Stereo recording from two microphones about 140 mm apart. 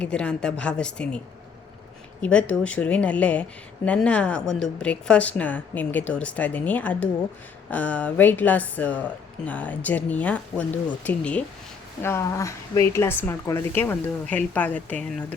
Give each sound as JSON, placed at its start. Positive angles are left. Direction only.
{"t": 0.0, "sound": "a woman's voice", "side_deg": 5}
{"t": 2.2, "sound": "a woman's voice", "side_deg": 10}
{"t": 12.0, "sound": "a woman's voice", "side_deg": 20}